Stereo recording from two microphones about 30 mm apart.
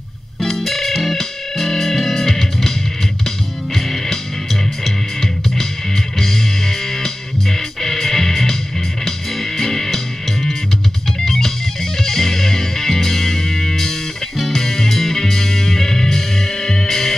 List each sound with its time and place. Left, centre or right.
0.4 s music: centre
0.7 s music: centre
6.1 s music: centre